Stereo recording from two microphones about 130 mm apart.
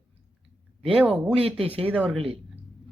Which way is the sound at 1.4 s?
50° right (ahead or behind).